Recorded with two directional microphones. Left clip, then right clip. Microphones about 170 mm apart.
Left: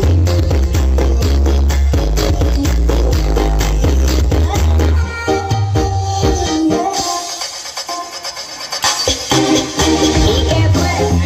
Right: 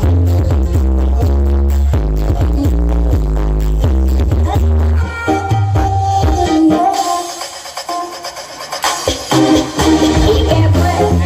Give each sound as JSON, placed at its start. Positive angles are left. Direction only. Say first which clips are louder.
{"t": 6.1, "sound": "music", "louder": "right 1 dB", "side_deg": 35}
{"t": 8.8, "sound": "music", "louder": "left 1 dB", "side_deg": 35}